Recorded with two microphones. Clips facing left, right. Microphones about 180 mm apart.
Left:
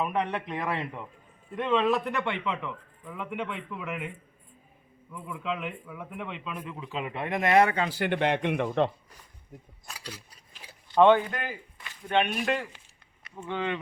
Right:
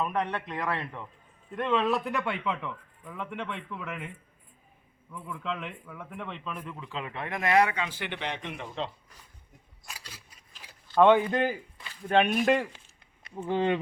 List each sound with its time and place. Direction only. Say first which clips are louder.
0.0 s a man's voice: left 1 dB; 10° left (ahead or behind)
1.5 s a man's voice: left 2 dB; centre (ahead or behind)
5.1 s a man's voice: left 2 dB; 5° left (ahead or behind); by 8.9 s 60° left (ahead or behind)
11.3 s speech: right 8 dB; 30° right (ahead or behind)
12.1 s a man's voice: right 3 dB; centre (ahead or behind)
13.2 s speech: right 5 dB; 30° right (ahead or behind)